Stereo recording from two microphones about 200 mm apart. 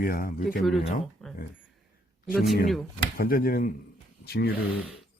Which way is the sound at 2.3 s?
Centre (ahead or behind).